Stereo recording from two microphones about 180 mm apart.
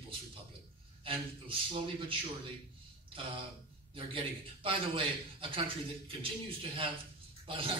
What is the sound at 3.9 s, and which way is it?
A man's voice, 30° right (ahead or behind).